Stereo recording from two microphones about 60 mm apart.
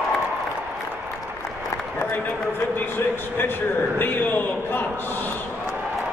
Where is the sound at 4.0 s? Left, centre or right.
Left.